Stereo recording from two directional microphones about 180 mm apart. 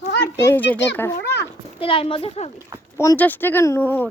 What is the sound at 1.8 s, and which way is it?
Speech, 30° left (ahead or behind).